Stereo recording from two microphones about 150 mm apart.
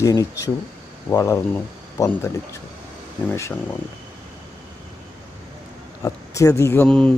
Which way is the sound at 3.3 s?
20° left (ahead or behind).